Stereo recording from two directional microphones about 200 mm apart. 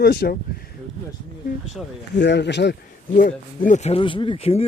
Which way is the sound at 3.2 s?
40° left (ahead or behind).